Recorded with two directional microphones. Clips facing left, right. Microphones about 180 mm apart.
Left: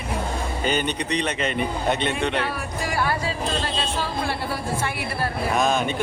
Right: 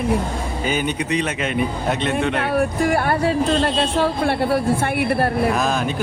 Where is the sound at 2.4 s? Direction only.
55° right (ahead or behind).